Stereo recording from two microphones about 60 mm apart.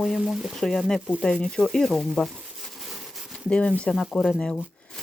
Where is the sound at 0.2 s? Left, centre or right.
Centre.